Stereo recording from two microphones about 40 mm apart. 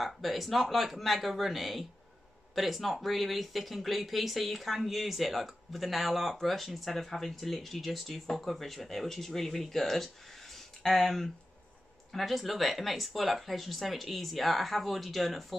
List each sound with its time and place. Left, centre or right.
0.0 s speech: centre
10.5 s a sound: centre
12.1 s speech: centre